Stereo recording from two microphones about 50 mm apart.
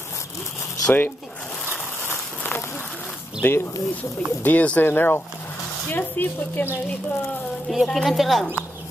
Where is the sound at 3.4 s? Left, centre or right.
Left.